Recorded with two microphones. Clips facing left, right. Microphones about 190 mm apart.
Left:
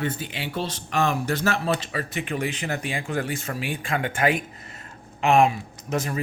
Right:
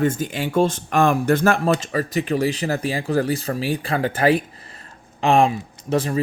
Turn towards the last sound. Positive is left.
turn(degrees=-30)  # may be behind; listen again after turning